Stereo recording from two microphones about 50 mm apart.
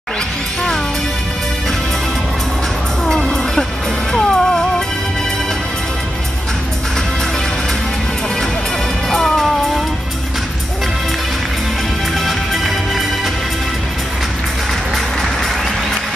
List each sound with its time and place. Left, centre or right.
3.1 s music: centre
9.1 s music: centre
12.3 s music: centre